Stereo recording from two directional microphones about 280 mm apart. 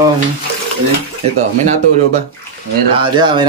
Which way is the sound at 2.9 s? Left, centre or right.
Centre.